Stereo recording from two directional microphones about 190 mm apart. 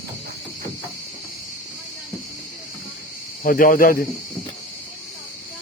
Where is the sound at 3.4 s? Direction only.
45° left (ahead or behind).